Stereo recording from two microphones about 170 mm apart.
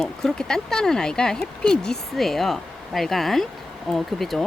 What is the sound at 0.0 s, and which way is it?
Speech, centre (ahead or behind).